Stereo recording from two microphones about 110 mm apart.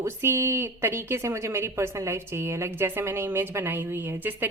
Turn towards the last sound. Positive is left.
turn(degrees=-15)  # may be behind; listen again after turning